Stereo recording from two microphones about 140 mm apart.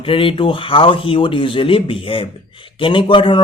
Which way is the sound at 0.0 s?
40° left (ahead or behind).